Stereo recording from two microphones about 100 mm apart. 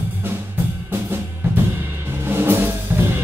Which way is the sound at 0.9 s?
20° right (ahead or behind).